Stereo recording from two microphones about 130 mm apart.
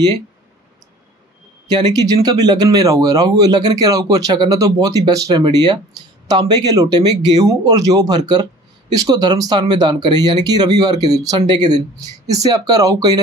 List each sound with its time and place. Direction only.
1.7 s speech: 30° right (ahead or behind)